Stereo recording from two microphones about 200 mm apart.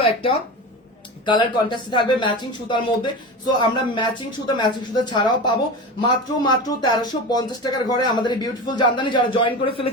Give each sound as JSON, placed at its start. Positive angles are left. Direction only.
{"t": 0.0, "sound": "speech", "side_deg": 25}